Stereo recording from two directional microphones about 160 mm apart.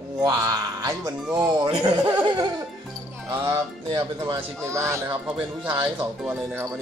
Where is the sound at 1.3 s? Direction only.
25° right (ahead or behind).